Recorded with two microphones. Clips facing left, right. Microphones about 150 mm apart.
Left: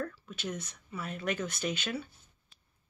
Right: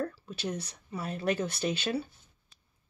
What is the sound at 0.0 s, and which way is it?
Speech, 35° right (ahead or behind).